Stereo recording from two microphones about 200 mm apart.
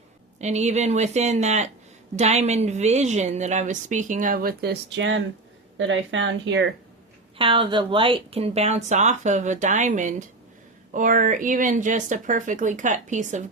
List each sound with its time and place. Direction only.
0.3 s a woman's voice: 35° right (ahead or behind); by 6.7 s 70° right (ahead or behind)
7.3 s a woman's voice: 25° right (ahead or behind)